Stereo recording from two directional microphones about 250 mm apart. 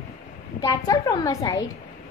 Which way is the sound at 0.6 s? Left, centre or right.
Centre.